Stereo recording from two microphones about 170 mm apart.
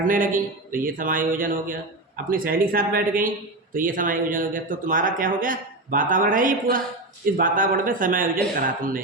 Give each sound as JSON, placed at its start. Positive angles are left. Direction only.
{"t": 0.0, "sound": "speech", "side_deg": -55}